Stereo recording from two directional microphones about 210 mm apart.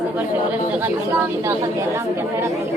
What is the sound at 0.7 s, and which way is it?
A woman's voice, 10° right (ahead or behind).